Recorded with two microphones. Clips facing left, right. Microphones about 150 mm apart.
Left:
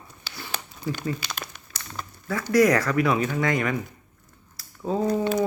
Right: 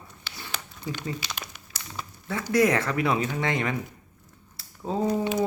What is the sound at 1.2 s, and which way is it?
Crumpling, 50° left (ahead or behind).